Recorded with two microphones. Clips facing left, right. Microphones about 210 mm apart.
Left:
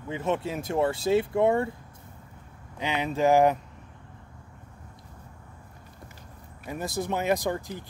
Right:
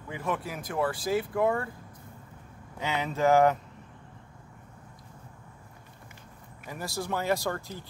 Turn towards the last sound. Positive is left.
turn(degrees=15)  # may be behind; listen again after turning